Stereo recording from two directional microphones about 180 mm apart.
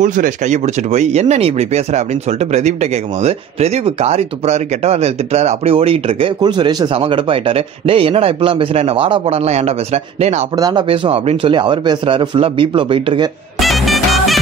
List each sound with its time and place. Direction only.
0.0 s speech: 45° right (ahead or behind)
10.6 s speech: 25° right (ahead or behind)
13.6 s music: centre (ahead or behind)